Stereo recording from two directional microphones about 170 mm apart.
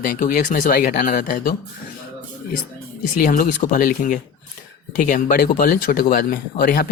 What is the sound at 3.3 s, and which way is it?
Speech, 50° left (ahead or behind).